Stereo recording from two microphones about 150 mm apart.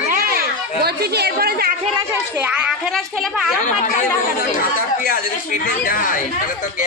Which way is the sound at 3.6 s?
55° left (ahead or behind).